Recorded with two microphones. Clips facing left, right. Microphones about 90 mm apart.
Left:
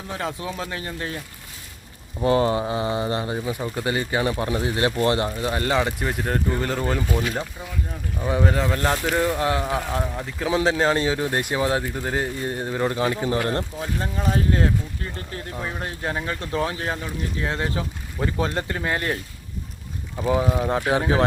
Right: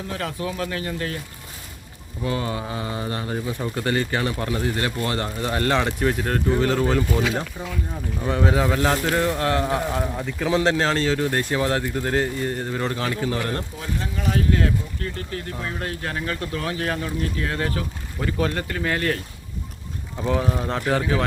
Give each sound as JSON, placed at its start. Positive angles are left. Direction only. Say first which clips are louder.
{"t": 0.1, "sound": "speech", "louder": "left 1 dB", "side_deg": 20}
{"t": 2.2, "sound": "speech", "louder": "left 7 dB", "side_deg": 35}
{"t": 2.6, "sound": "speech", "louder": "left 5 dB", "side_deg": 20}
{"t": 5.4, "sound": "speech", "louder": "even", "side_deg": 5}
{"t": 8.2, "sound": "speech", "louder": "right 1 dB", "side_deg": 0}
{"t": 20.1, "sound": "speech", "louder": "left 2 dB", "side_deg": 10}